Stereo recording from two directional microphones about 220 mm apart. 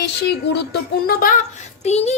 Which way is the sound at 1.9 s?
30° left (ahead or behind).